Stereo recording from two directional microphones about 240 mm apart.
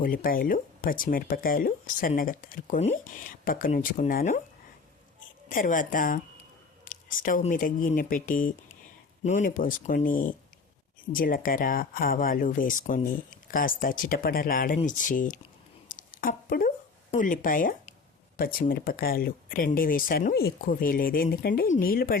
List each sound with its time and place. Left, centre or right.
0.0 s speech: left
5.5 s speech: left
15.9 s a sound: left
18.3 s speech: left